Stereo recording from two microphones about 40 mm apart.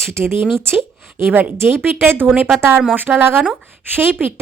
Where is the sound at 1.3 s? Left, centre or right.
Right.